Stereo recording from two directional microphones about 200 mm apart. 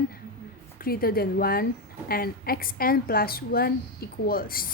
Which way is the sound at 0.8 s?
50° left (ahead or behind).